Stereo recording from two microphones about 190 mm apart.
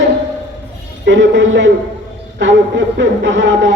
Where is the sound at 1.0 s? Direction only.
75° right (ahead or behind).